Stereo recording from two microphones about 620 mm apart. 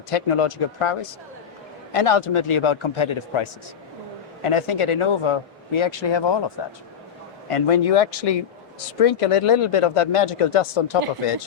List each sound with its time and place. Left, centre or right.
0.1 s speech: left
7.5 s speech: left